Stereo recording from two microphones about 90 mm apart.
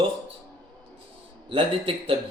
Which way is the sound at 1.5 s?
85° right.